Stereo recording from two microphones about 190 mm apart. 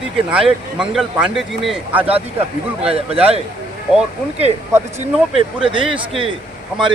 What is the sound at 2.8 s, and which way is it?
Speech, 30° right (ahead or behind).